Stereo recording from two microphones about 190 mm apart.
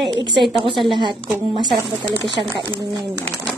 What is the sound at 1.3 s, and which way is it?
Speech, 25° right (ahead or behind).